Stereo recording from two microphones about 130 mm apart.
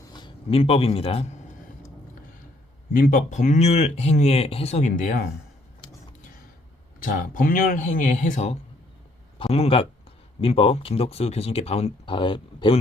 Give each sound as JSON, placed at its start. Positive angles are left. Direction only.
{"t": 0.1, "sound": "a man's voice", "side_deg": 35}
{"t": 2.9, "sound": "speech", "side_deg": 90}
{"t": 7.0, "sound": "speech", "side_deg": 90}
{"t": 9.4, "sound": "speech", "side_deg": 50}
{"t": 12.1, "sound": "speech", "side_deg": 40}